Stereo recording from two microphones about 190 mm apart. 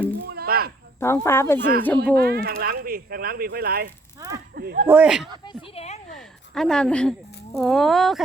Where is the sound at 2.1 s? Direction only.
55° right (ahead or behind).